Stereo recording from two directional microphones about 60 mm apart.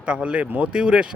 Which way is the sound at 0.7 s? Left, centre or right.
Centre.